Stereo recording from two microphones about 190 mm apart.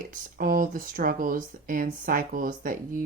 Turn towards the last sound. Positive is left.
turn(degrees=-45)  # may be behind; listen again after turning